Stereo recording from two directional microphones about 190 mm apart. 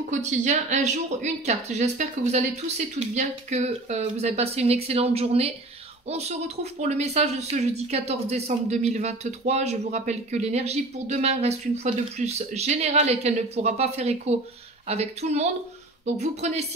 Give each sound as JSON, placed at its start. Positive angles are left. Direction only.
{"t": 0.1, "sound": "speech", "side_deg": -40}